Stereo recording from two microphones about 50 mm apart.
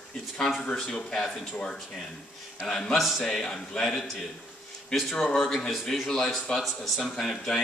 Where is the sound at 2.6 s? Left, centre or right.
Centre.